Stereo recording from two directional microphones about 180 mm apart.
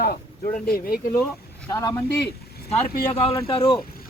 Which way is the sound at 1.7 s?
20° left (ahead or behind).